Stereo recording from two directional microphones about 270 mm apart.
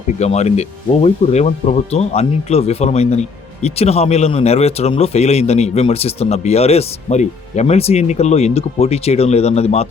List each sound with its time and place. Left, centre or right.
0.2 s speech: left